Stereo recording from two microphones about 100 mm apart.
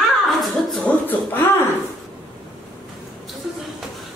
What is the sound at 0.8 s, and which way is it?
Speech, 20° left (ahead or behind).